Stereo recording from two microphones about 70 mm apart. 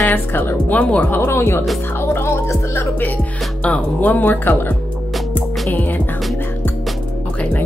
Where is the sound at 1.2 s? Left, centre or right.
Left.